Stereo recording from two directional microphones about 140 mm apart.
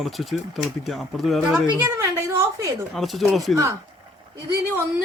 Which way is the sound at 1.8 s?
20° right (ahead or behind).